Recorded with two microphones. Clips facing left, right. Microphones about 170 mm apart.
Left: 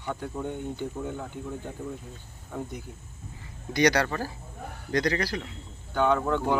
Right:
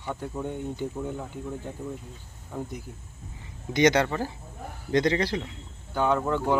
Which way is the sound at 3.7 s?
20° right (ahead or behind).